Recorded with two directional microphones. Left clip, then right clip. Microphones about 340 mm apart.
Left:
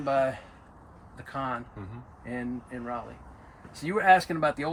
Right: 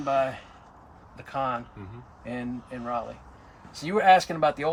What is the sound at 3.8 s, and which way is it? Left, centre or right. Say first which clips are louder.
Speech: right 2 dB; right.